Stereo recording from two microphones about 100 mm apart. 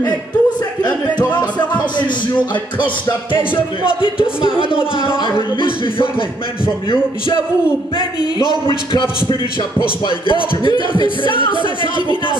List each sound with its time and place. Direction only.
0.0 s music: 45° left (ahead or behind)
3.8 s speech: 60° left (ahead or behind)
10.0 s speech: 55° left (ahead or behind)